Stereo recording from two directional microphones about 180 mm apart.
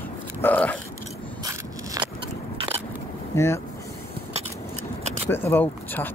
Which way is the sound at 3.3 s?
15° left (ahead or behind).